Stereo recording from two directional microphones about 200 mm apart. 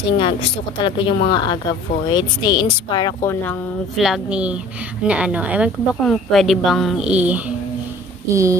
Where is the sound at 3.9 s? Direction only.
Centre (ahead or behind).